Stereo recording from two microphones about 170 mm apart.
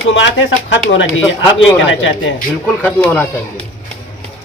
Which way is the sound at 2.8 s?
10° left (ahead or behind).